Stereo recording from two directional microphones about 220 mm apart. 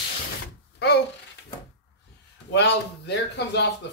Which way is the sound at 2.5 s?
50° left (ahead or behind).